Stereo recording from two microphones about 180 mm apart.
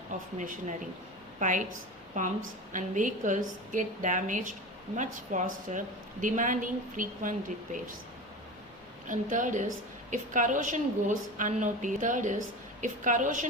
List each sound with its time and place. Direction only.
0.1 s a woman's voice: 45° right (ahead or behind)
9.0 s a woman's voice: 45° right (ahead or behind)